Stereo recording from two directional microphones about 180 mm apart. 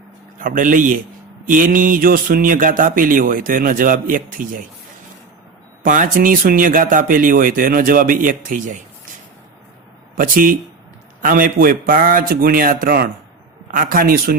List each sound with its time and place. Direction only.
0.3 s speech: 50° right (ahead or behind)
5.8 s speech: 50° right (ahead or behind)
10.2 s speech: 50° right (ahead or behind)